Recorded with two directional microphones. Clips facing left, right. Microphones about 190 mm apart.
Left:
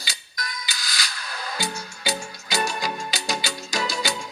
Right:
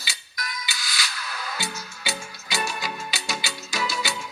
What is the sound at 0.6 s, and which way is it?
Music, 45° left (ahead or behind).